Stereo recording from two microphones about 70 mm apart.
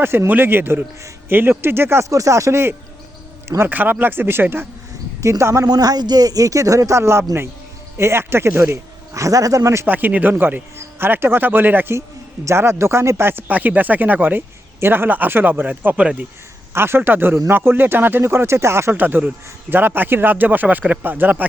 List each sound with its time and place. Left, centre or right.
0.0 s speech: right
2.0 s speech: right
3.6 s speech: right
5.6 s speech: right
9.8 s speech: right
12.5 s speech: right
13.5 s speech: right
16.7 s speech: right